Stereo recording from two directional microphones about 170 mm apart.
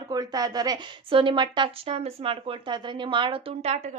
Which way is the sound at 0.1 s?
25° right (ahead or behind).